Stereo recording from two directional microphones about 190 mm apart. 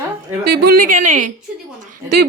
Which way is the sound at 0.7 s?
45° right (ahead or behind).